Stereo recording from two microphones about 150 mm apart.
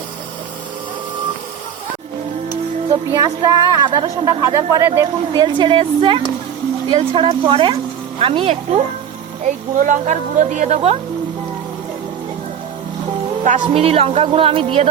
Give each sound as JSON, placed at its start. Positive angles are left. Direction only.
{"t": 2.9, "sound": "a man's voice", "side_deg": -25}
{"t": 9.4, "sound": "speech", "side_deg": -60}
{"t": 13.4, "sound": "speech", "side_deg": -55}
{"t": 13.8, "sound": "a man's voice", "side_deg": -40}